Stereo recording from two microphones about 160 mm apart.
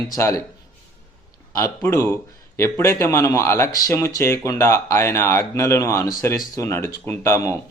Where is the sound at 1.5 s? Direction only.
15° left (ahead or behind).